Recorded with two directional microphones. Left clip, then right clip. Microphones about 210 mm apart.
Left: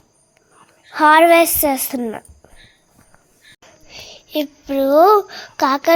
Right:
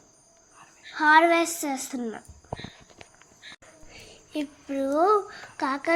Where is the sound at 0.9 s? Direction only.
40° left (ahead or behind).